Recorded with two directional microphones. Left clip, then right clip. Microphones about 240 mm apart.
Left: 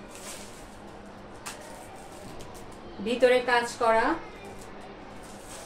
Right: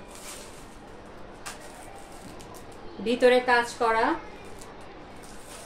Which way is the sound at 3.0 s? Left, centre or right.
Right.